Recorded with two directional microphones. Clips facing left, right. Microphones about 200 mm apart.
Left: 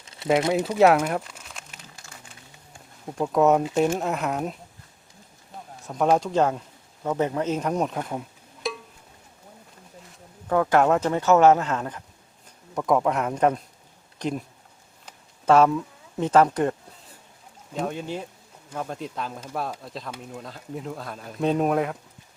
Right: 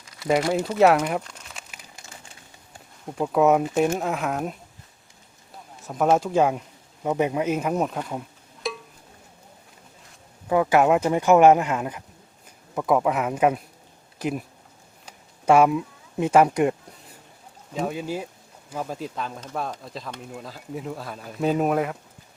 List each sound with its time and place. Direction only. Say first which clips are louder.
0.0 s a sound: left 1 dB; 25° left (ahead or behind)
0.8 s crumpling: even; 5° left (ahead or behind)
3.1 s speech: even; 5° right (ahead or behind)
5.9 s speech: right 1 dB; 5° right (ahead or behind)
8.6 s music: even; centre (ahead or behind)
10.5 s speech: right 1 dB; 10° right (ahead or behind)
15.0 s a sound: right 1 dB; 10° right (ahead or behind)
17.7 s speech: right 2 dB; 5° right (ahead or behind)